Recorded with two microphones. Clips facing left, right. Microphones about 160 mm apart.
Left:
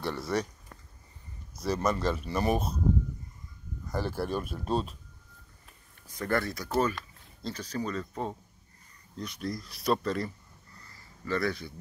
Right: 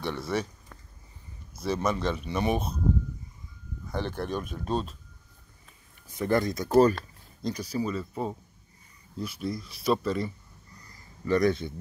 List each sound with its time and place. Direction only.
0.0 s speech: centre (ahead or behind)
3.8 s speech: 5° left (ahead or behind)
6.1 s speech: 15° right (ahead or behind); by 10.3 s centre (ahead or behind)
10.7 s a sound: 15° right (ahead or behind)